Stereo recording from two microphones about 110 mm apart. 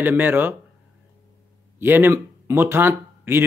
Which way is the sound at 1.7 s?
20° right (ahead or behind).